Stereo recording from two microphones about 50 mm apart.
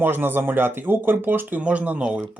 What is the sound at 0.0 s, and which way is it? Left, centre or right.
Speech, right.